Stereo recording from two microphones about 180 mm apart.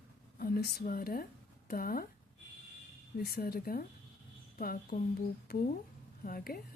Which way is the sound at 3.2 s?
60° left (ahead or behind).